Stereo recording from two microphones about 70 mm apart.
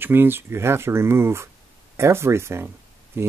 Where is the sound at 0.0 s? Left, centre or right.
Right.